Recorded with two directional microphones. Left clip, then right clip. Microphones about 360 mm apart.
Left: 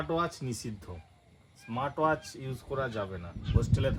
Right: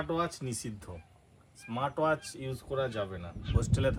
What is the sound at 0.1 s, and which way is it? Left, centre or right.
Speech, centre.